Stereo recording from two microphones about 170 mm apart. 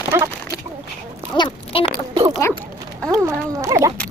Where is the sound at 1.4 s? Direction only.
30° left (ahead or behind).